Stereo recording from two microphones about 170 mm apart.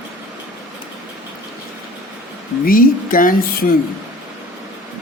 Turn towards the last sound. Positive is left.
turn(degrees=55)  # may be behind; listen again after turning